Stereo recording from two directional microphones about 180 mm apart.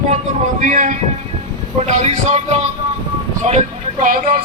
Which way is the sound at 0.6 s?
45° right (ahead or behind).